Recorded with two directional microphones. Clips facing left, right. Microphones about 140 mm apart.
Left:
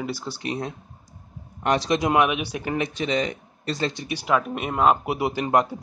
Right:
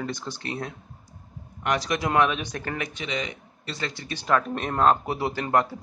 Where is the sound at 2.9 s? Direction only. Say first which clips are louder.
Left 7 dB; 35° left (ahead or behind).